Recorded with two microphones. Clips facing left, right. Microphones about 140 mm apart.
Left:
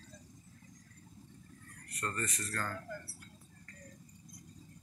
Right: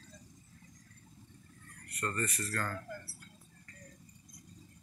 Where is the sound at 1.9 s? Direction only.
15° left (ahead or behind).